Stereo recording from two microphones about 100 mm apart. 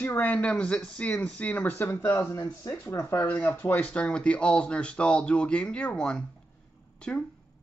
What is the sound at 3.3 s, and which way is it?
Speech, 15° left (ahead or behind).